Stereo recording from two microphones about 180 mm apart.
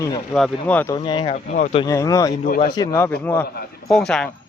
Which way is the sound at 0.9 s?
25° left (ahead or behind).